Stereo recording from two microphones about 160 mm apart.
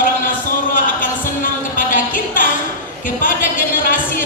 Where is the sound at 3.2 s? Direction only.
60° left (ahead or behind).